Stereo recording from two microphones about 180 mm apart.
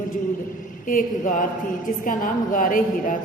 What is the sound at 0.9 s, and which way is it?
A woman's voice, 50° left (ahead or behind).